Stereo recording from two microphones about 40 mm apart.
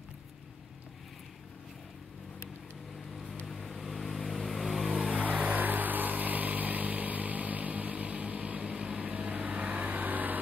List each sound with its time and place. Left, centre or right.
3.4 s vehicle: centre
5.0 s vehicle: right